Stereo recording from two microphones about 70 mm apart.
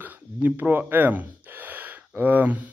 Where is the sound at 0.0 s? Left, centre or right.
Right.